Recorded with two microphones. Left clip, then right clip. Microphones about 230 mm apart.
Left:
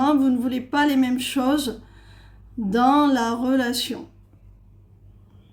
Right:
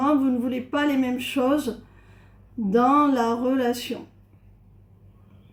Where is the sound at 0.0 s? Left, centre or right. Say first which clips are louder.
Left 2 dB; left.